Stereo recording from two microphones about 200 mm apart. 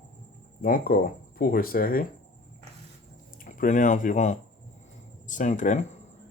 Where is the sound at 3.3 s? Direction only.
45° left (ahead or behind).